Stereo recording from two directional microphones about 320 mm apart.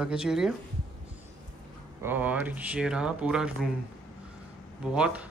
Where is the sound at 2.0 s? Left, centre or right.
Centre.